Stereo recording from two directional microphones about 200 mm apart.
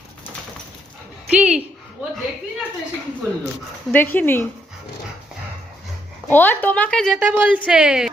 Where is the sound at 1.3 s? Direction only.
5° right (ahead or behind).